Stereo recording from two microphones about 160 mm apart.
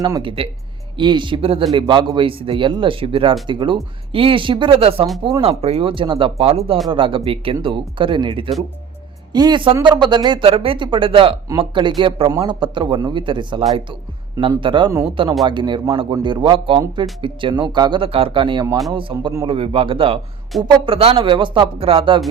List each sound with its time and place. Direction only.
0.0 s a man's voice: 30° right (ahead or behind)